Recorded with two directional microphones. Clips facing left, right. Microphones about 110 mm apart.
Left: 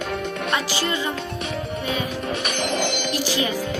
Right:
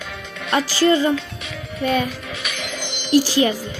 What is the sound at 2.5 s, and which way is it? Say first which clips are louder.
Music: left 7 dB; 55° left (ahead or behind).